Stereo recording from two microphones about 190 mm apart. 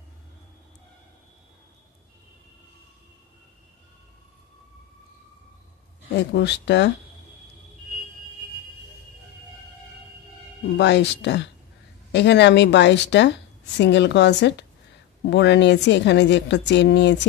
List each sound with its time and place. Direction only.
6.1 s a woman's voice: 65° left (ahead or behind)
10.8 s a woman's voice: 65° left (ahead or behind)